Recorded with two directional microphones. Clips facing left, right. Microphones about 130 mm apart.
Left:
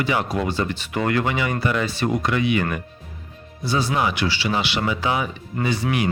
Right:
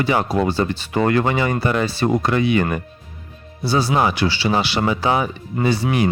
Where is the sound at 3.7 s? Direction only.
35° right (ahead or behind).